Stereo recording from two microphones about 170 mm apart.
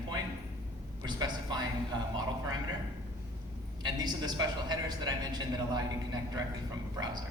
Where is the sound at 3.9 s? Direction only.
25° right (ahead or behind).